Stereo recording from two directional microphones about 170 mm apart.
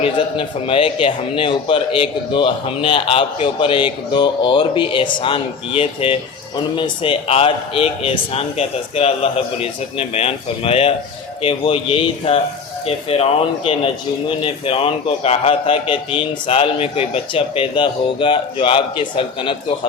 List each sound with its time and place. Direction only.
0.0 s speech: 30° left (ahead or behind)